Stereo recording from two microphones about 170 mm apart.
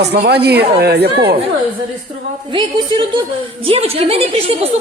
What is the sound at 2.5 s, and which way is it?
A woman's voice, 30° right (ahead or behind).